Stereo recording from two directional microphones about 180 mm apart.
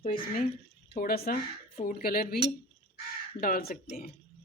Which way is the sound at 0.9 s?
55° left (ahead or behind).